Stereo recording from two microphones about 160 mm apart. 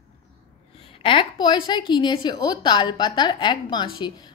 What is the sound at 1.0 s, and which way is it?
A woman's voice, 30° left (ahead or behind).